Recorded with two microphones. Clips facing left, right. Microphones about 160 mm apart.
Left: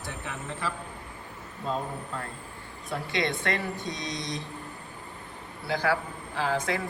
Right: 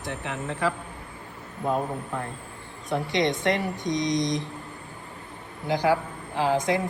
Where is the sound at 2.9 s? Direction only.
20° right (ahead or behind).